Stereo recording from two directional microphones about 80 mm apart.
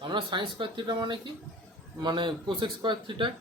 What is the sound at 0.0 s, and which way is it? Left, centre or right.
A man's voice, right.